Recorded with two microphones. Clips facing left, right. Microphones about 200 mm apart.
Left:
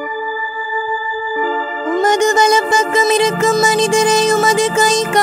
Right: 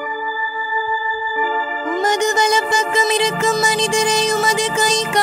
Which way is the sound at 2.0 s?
50° left (ahead or behind).